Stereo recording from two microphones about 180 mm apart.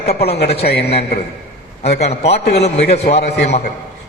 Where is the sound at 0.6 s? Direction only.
65° left (ahead or behind).